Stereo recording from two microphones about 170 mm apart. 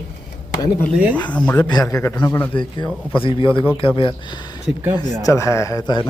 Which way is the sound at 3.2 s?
30° left (ahead or behind).